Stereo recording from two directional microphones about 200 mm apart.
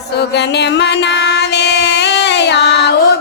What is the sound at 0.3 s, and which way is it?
Music, 60° left (ahead or behind).